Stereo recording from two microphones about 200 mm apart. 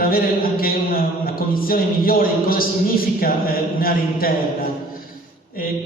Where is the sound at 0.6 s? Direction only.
45° left (ahead or behind).